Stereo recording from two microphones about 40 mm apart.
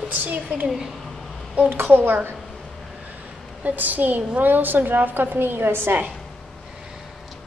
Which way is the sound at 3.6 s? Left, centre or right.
Right.